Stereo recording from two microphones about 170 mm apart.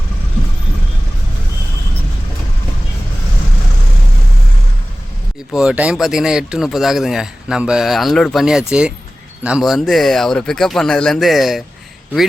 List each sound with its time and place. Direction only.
5.5 s speech: 5° right (ahead or behind)